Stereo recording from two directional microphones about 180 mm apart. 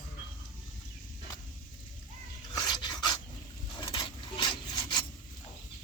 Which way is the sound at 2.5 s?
25° left (ahead or behind).